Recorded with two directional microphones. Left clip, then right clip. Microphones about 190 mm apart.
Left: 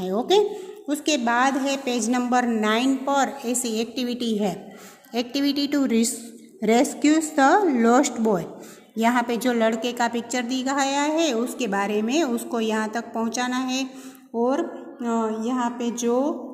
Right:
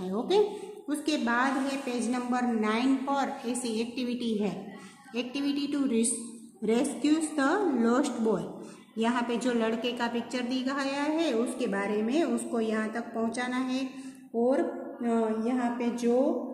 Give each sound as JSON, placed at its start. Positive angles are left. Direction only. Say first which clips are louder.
{"t": 0.0, "sound": "a woman's voice", "louder": "left 6 dB", "side_deg": 35}
{"t": 15.0, "sound": "speech", "louder": "left 4 dB", "side_deg": 45}